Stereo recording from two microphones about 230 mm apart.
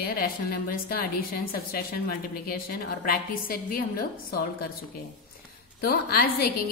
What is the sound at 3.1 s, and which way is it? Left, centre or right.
Speech, left.